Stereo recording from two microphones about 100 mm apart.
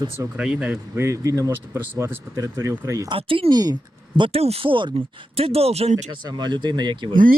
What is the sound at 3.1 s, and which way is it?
Speech, 65° right (ahead or behind).